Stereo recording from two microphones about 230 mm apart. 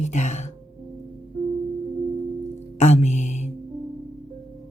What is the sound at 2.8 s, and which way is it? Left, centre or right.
Music, left.